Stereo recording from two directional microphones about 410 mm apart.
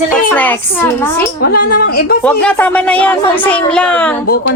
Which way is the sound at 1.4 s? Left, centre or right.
Left.